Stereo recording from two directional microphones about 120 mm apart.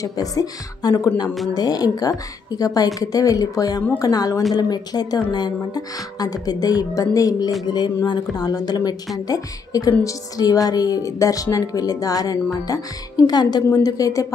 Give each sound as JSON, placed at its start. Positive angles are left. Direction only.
{"t": 0.0, "sound": "a woman's voice", "side_deg": 30}